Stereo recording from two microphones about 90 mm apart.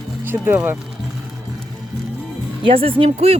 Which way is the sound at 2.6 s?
90° right.